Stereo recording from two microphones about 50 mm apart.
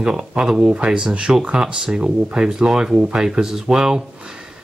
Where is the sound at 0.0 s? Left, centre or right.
Centre.